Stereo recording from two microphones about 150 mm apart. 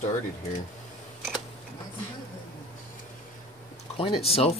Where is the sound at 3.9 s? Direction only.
40° left (ahead or behind).